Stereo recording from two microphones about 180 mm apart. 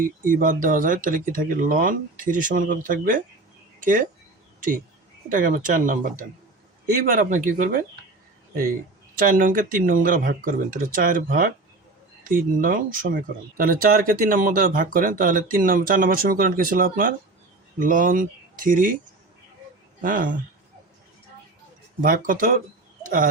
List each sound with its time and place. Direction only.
0.0 s speech: 50° right (ahead or behind)
5.3 s speech: 50° right (ahead or behind)
9.1 s speech: 50° right (ahead or behind)
20.0 s speech: 50° right (ahead or behind)
22.0 s speech: 50° right (ahead or behind)